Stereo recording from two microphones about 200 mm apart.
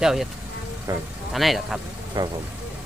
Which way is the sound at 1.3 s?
Centre (ahead or behind).